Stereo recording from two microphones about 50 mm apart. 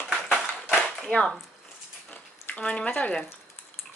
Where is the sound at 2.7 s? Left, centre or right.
Left.